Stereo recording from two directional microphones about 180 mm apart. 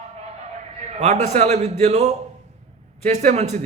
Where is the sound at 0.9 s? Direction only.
35° right (ahead or behind).